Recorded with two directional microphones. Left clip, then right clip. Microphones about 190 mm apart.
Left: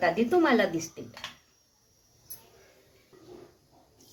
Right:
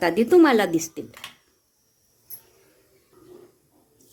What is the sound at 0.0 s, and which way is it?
Speech, 60° right (ahead or behind).